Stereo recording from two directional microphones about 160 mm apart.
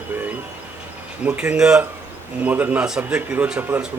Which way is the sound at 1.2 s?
10° right (ahead or behind).